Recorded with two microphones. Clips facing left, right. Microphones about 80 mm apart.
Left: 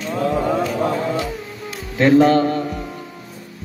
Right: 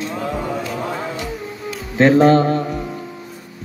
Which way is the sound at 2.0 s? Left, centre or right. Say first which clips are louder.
Right 1 dB; right.